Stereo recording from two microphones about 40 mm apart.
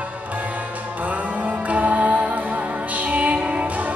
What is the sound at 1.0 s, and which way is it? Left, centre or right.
Music, right.